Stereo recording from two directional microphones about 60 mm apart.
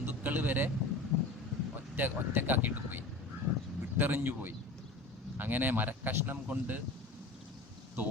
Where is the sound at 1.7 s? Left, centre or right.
Right.